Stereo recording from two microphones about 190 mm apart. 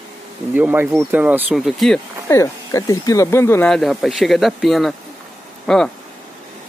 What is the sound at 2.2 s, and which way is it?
Speech, 15° left (ahead or behind).